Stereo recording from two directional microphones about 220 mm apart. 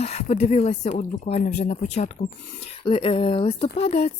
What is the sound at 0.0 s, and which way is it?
Speech, 30° left (ahead or behind).